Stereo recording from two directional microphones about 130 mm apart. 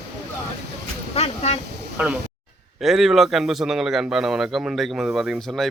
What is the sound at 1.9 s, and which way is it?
Speech, 15° right (ahead or behind).